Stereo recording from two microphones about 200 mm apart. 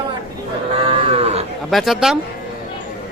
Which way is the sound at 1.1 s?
30° right (ahead or behind).